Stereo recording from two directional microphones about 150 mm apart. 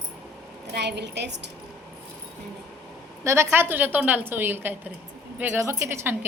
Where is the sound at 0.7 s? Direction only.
90° right.